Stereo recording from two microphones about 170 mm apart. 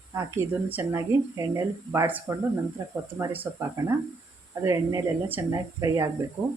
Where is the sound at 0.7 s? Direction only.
15° right (ahead or behind).